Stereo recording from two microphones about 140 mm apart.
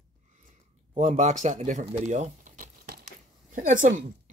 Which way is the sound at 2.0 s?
60° right (ahead or behind).